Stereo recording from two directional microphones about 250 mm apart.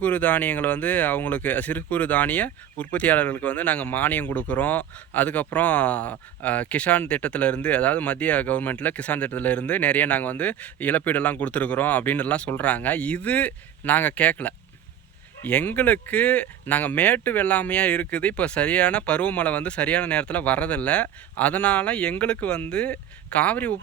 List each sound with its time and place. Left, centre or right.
0.0 s speech: centre